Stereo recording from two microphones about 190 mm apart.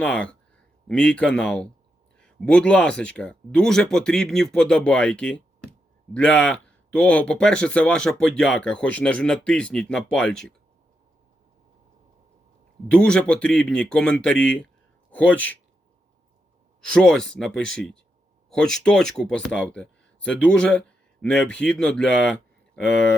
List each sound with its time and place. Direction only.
0.0 s speech: 5° left (ahead or behind)
12.9 s speech: 5° left (ahead or behind)
16.8 s speech: 5° left (ahead or behind)